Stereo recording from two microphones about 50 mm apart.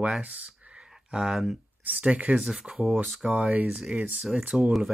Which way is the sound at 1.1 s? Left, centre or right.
Centre.